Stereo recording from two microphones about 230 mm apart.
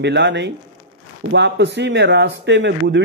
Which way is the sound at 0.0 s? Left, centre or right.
Right.